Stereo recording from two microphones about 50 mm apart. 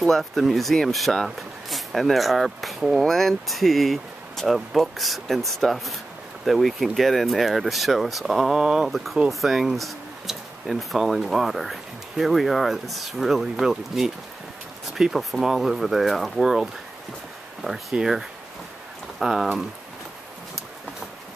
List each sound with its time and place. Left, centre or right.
0.1 s speech: centre
17.9 s speech: centre
19.1 s speech: centre